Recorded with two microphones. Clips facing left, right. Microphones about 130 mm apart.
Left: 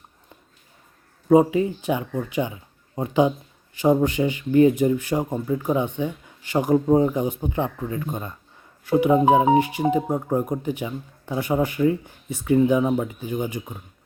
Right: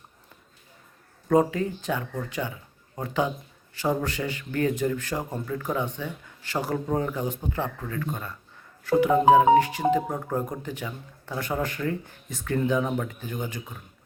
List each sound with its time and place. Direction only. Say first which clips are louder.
1.3 s speech: left 5 dB; 15° left (ahead or behind)